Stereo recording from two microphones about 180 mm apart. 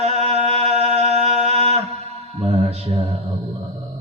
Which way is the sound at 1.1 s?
35° right (ahead or behind).